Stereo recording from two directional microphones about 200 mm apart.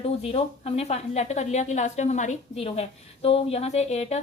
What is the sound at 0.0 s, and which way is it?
A woman's voice, 30° left (ahead or behind).